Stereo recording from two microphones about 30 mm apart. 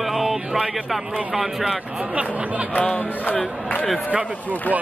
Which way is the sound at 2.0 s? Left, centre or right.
Right.